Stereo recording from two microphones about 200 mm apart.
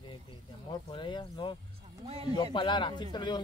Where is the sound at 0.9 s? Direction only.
25° left (ahead or behind).